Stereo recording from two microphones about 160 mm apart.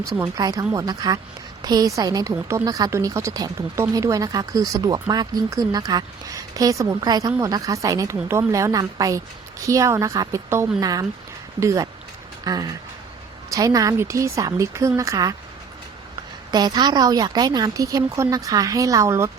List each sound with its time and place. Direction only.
0.0 s speech: 20° right (ahead or behind)
2.3 s speech: 10° right (ahead or behind)
2.6 s speech: 20° right (ahead or behind)
16.5 s speech: 25° right (ahead or behind)